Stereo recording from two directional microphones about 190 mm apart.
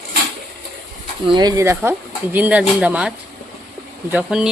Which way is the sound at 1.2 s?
25° right (ahead or behind).